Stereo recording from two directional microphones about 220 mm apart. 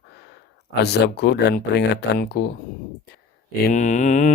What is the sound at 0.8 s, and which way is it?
Speech, 50° left (ahead or behind).